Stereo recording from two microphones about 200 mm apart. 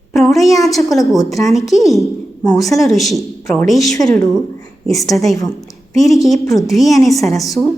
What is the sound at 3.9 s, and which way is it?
Speech, 20° left (ahead or behind).